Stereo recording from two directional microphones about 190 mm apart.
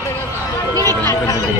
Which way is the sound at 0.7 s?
20° right (ahead or behind).